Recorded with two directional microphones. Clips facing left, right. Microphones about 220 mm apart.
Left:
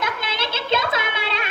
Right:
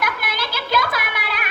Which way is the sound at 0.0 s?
25° left (ahead or behind).